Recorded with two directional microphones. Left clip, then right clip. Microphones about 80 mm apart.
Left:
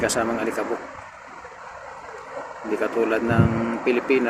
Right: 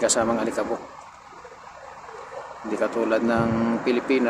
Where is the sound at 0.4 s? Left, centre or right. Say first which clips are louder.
Even; centre.